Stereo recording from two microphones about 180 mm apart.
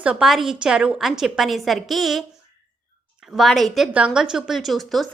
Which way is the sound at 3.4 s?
Centre (ahead or behind).